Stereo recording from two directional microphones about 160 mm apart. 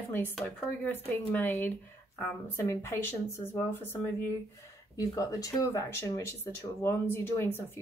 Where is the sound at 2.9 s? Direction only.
15° left (ahead or behind).